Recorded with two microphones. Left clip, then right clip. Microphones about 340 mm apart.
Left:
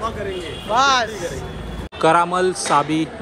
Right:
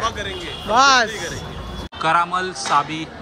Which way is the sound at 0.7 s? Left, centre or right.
Right.